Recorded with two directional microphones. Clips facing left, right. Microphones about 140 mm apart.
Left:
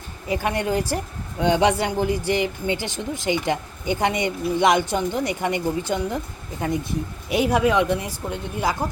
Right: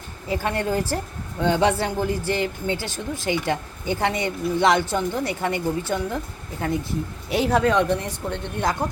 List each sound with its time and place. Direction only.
0.3 s a woman's voice: 15° left (ahead or behind)
7.3 s a woman's voice: 15° left (ahead or behind)